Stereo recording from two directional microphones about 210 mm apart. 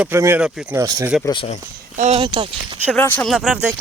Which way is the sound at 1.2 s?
25° left (ahead or behind).